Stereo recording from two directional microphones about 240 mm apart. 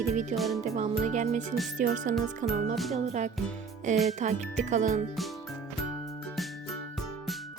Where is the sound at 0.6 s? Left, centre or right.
Right.